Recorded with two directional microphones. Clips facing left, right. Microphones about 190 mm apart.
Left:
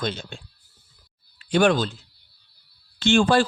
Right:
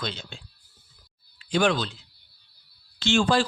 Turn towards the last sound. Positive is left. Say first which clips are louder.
# left 4 dB
turn(degrees=55)  # may be behind; listen again after turning